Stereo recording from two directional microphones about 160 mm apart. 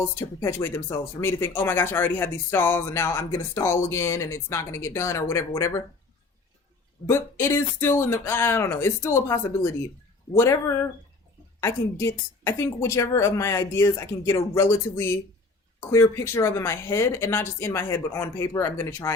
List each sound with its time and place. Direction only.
0.2 s speech: 15° left (ahead or behind)
7.1 s speech: 15° left (ahead or behind)